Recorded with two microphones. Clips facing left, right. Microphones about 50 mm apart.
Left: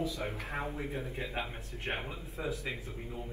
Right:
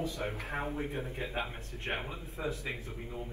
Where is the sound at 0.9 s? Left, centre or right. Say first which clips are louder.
Even; right.